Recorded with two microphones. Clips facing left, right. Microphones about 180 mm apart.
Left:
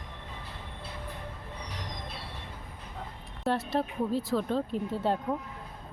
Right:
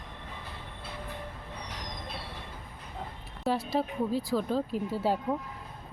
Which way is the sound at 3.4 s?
Centre (ahead or behind).